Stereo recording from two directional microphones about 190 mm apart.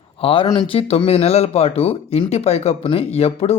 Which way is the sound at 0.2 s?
30° left (ahead or behind).